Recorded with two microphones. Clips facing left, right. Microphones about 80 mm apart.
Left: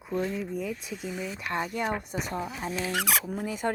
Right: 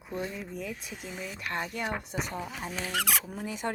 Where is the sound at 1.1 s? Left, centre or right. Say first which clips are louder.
Left 3 dB; left.